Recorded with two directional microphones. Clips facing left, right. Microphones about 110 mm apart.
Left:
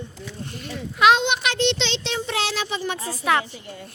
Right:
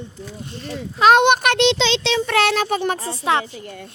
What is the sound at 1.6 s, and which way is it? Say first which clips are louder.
Speech: right 6 dB; 90° right.